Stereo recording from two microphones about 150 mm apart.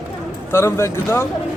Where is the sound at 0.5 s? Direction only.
15° left (ahead or behind).